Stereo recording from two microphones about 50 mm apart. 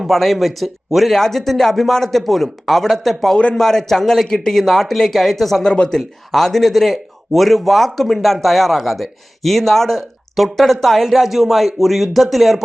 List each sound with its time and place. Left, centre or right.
0.0 s speech: centre
1.1 s a man's voice: centre
5.6 s a man's voice: centre
6.0 s speech: centre